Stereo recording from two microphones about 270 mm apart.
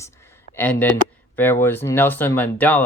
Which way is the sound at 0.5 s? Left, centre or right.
Centre.